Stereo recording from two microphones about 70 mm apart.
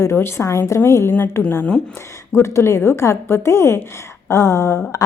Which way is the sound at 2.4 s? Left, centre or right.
Left.